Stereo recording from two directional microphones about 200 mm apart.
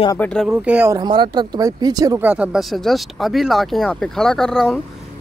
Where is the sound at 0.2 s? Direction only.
5° left (ahead or behind).